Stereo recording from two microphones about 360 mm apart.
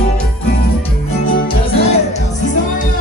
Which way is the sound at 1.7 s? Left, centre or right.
Centre.